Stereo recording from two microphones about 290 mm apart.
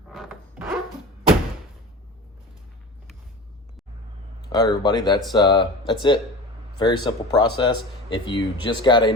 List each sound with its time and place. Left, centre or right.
0.1 s zipper: centre
4.4 s speech: centre